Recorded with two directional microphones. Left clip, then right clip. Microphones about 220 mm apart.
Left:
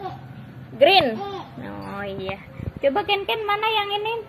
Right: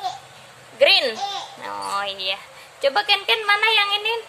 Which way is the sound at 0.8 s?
10° right (ahead or behind).